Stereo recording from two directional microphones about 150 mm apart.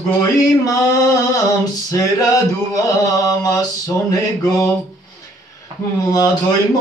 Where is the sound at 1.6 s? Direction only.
25° left (ahead or behind).